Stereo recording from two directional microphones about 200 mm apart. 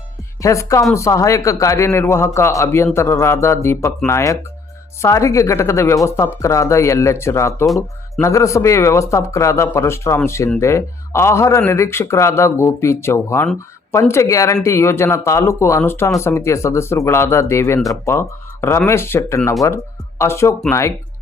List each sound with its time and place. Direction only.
0.4 s speech: 15° left (ahead or behind)